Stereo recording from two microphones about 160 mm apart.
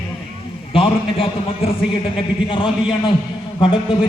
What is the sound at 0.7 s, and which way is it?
Speech, 35° left (ahead or behind).